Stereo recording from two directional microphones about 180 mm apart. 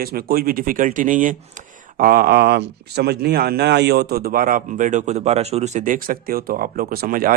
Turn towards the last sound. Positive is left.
turn(degrees=-50)  # may be behind; listen again after turning